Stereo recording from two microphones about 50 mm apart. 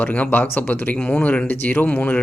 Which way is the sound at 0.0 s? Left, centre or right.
Left.